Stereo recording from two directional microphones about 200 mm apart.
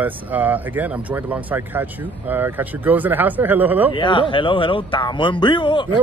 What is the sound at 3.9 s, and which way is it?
A man's voice, 25° left (ahead or behind).